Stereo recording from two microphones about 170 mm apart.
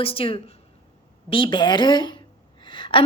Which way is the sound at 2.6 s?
30° left (ahead or behind).